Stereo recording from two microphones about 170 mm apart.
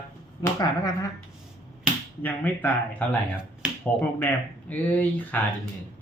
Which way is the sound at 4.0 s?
10° left (ahead or behind).